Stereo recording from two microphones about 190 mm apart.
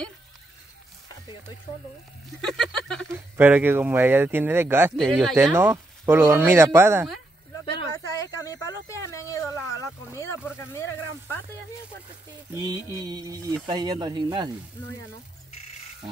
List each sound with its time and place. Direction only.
2.4 s a sound: centre (ahead or behind)
3.1 s speech: 10° right (ahead or behind)
4.9 s a sound: centre (ahead or behind)
5.6 s speech: 10° right (ahead or behind)
7.6 s speech: 20° left (ahead or behind)
12.5 s mantra: 20° right (ahead or behind)